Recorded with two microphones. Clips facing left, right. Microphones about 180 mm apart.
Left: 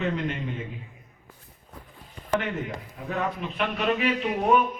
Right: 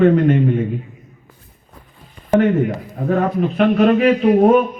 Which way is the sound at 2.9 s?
50° right (ahead or behind).